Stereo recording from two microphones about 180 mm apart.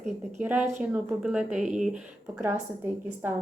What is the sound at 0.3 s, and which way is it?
A woman's voice, 10° right (ahead or behind).